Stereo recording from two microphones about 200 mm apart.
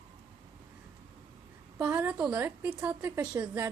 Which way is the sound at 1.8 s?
5° right (ahead or behind).